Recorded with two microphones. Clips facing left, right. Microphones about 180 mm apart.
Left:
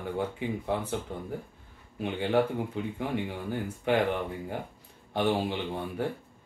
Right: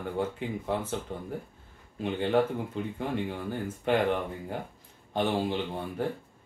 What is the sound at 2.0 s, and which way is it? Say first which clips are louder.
A man's voice: right 1 dB; 15° left (ahead or behind).